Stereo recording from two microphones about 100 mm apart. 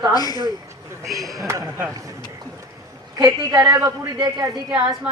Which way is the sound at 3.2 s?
35° right (ahead or behind).